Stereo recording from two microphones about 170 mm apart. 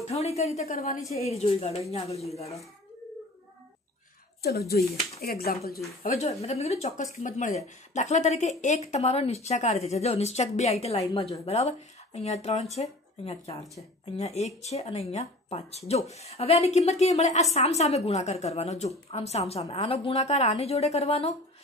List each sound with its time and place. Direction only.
0.0 s speech: 40° left (ahead or behind)
4.4 s speech: 65° left (ahead or behind)
6.1 s speech: 40° left (ahead or behind)